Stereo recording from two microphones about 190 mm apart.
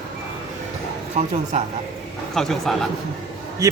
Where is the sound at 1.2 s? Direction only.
40° right (ahead or behind).